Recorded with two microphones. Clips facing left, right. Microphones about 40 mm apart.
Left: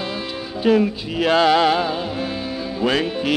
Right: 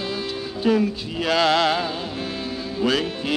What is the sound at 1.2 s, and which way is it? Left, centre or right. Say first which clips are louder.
Mantra: left 4 dB; left.